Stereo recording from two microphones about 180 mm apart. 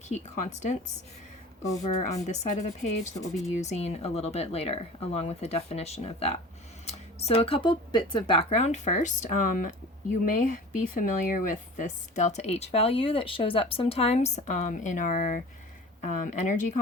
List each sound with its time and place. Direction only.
0.1 s speech: 40° left (ahead or behind)
1.8 s speech: 40° left (ahead or behind)